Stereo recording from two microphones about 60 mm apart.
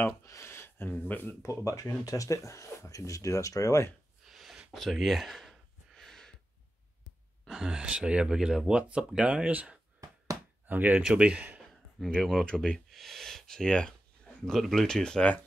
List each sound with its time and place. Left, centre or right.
0.2 s gasp: left
1.4 s speech: left
4.3 s a sound: centre
7.4 s speech: centre; by 11.1 s right
11.1 s speech: centre
12.2 s speech: centre